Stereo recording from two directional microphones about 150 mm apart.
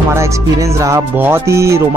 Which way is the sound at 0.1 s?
20° right (ahead or behind).